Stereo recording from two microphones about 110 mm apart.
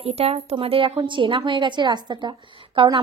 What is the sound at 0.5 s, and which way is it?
A woman's voice, 55° right (ahead or behind).